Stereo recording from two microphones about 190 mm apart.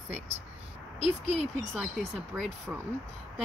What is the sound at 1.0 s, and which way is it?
Speech, 35° right (ahead or behind).